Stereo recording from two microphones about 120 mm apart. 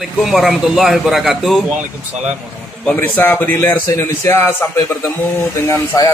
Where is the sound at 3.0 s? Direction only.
20° left (ahead or behind).